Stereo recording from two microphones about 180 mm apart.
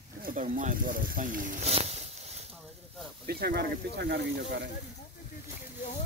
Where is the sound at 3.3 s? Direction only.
60° right (ahead or behind).